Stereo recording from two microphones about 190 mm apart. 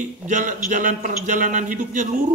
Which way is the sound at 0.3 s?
40° right (ahead or behind).